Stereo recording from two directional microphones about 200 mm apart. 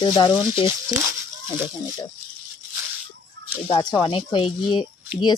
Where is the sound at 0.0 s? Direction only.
20° left (ahead or behind).